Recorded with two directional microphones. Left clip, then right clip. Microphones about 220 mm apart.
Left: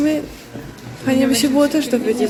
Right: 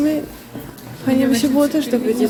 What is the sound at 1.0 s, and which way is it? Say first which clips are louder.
A man's voice: left 1 dB; centre (ahead or behind).